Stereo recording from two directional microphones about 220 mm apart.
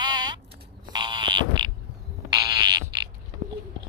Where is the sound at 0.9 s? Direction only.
20° right (ahead or behind).